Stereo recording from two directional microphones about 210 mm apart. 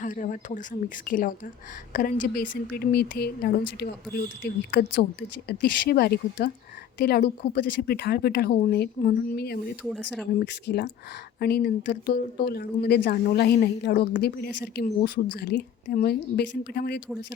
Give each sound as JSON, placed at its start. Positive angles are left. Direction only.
{"t": 0.0, "sound": "speech", "side_deg": 35}